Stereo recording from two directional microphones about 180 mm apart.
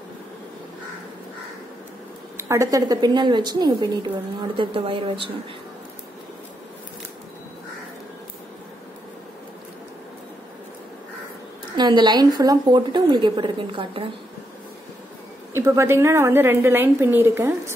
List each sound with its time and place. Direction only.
2.3 s a woman's voice: 15° right (ahead or behind)
11.7 s a woman's voice: 25° right (ahead or behind)
15.5 s a woman's voice: 15° right (ahead or behind)